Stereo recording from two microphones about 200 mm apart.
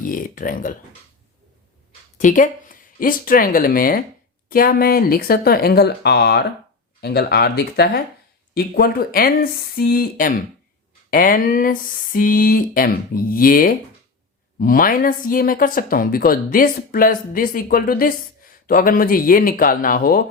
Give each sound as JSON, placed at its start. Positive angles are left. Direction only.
{"t": 0.0, "sound": "speech", "side_deg": 45}
{"t": 2.1, "sound": "speech", "side_deg": 40}